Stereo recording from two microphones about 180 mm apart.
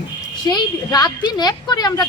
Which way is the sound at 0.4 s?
20° left (ahead or behind).